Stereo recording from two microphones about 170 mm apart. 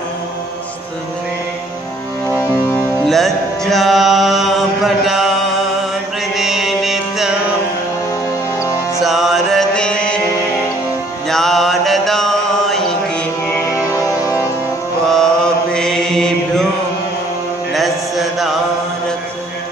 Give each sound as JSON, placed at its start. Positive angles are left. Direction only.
{"t": 3.1, "sound": "mantra", "side_deg": 0}
{"t": 6.3, "sound": "music", "side_deg": 0}
{"t": 9.0, "sound": "mantra", "side_deg": 0}
{"t": 11.2, "sound": "mantra", "side_deg": 0}
{"t": 13.5, "sound": "music", "side_deg": 15}
{"t": 15.0, "sound": "chant", "side_deg": 5}
{"t": 17.7, "sound": "chant", "side_deg": 0}